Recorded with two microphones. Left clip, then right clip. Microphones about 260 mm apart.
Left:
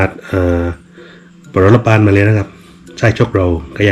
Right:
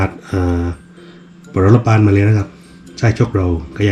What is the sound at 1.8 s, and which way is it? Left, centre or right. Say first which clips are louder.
Speech: left 4 dB; left.